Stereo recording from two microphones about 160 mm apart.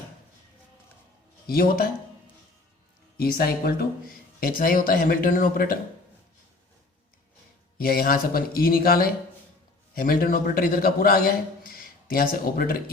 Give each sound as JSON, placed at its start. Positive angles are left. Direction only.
{"t": 1.5, "sound": "speech", "side_deg": 65}
{"t": 3.2, "sound": "speech", "side_deg": 70}
{"t": 7.8, "sound": "speech", "side_deg": 70}